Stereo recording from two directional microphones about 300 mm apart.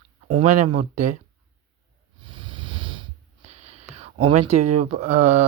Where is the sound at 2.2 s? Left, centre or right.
Centre.